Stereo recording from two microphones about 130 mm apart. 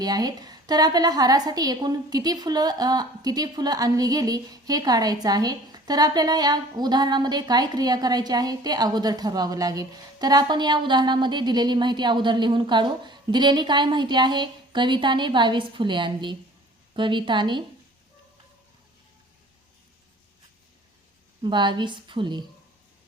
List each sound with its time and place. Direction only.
0.0 s a woman's voice: 30° right (ahead or behind)
21.4 s a woman's voice: 35° right (ahead or behind)